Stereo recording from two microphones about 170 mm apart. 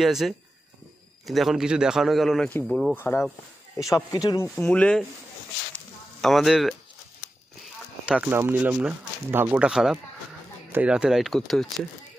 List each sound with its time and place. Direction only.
0.0 s a man's voice: centre (ahead or behind); by 4.5 s 20° left (ahead or behind)
4.6 s speech: 5° left (ahead or behind)
6.2 s a man's voice: centre (ahead or behind)
8.0 s a man's voice: 5° right (ahead or behind)